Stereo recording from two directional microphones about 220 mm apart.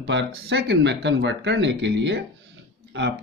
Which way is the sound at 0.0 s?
50° right (ahead or behind).